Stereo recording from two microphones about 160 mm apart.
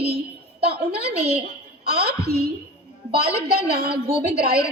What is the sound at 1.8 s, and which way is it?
A woman's voice, 80° right.